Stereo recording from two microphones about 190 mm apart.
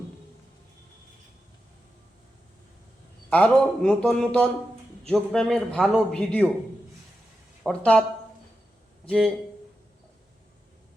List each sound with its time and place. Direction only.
3.2 s a man's voice: 5° left (ahead or behind)
7.6 s a man's voice: 5° left (ahead or behind)
9.0 s speech: centre (ahead or behind)